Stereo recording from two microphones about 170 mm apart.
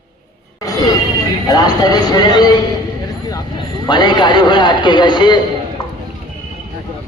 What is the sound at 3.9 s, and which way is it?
A man's voice, 25° left (ahead or behind).